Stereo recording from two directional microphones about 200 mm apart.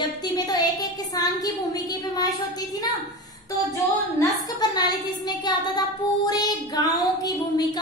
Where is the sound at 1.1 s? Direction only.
20° left (ahead or behind).